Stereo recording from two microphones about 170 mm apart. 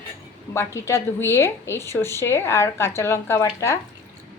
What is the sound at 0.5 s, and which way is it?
A woman's voice, 15° left (ahead or behind).